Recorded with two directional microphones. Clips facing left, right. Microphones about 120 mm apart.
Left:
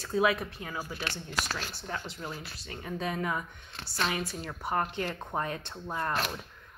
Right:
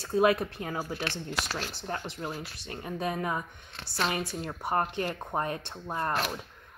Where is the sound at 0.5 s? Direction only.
45° right (ahead or behind).